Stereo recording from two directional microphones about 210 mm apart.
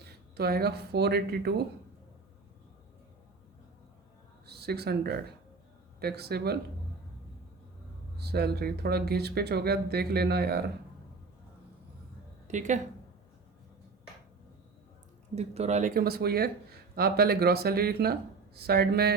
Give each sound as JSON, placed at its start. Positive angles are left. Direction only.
{"t": 0.3, "sound": "speech", "side_deg": -50}
{"t": 4.4, "sound": "speech", "side_deg": -50}
{"t": 8.2, "sound": "speech", "side_deg": -50}
{"t": 12.5, "sound": "a woman's voice", "side_deg": -35}
{"t": 15.4, "sound": "speech", "side_deg": -30}